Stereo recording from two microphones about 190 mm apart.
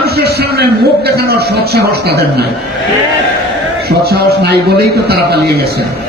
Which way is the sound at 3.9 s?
55° right (ahead or behind).